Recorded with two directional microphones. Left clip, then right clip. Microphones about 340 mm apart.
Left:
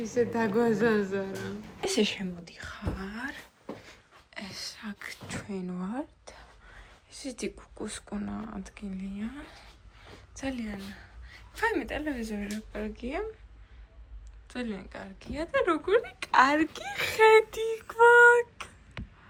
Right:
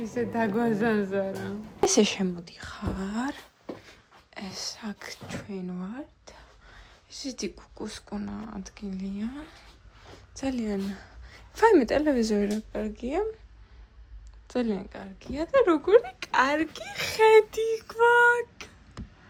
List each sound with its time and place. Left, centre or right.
0.0 s speech: centre
2.4 s speech: centre
12.5 s speech: centre
14.4 s speech: centre